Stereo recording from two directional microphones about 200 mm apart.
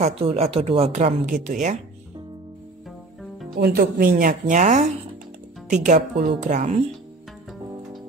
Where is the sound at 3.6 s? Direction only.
50° right (ahead or behind).